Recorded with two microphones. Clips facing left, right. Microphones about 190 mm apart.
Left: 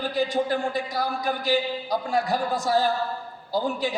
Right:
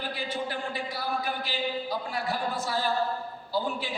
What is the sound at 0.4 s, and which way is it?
A man's voice, 40° left (ahead or behind).